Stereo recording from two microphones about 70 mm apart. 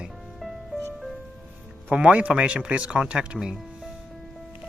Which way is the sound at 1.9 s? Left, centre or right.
Centre.